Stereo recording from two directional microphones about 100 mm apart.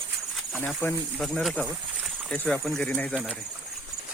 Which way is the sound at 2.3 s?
10° left (ahead or behind).